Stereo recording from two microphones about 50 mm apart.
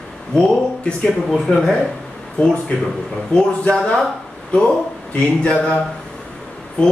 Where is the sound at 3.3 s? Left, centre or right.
Left.